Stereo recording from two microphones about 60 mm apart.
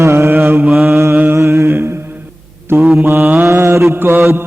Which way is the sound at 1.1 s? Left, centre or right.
Right.